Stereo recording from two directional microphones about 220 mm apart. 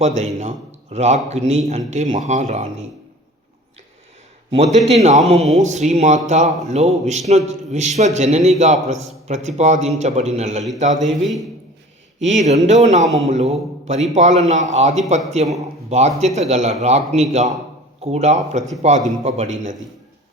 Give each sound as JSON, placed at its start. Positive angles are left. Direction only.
{"t": 0.0, "sound": "speech", "side_deg": -30}
{"t": 4.5, "sound": "a man's voice", "side_deg": -30}
{"t": 11.2, "sound": "a man's voice", "side_deg": 0}
{"t": 12.2, "sound": "a man's voice", "side_deg": -30}